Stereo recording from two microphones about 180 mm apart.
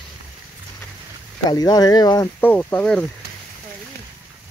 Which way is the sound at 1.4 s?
20° left (ahead or behind).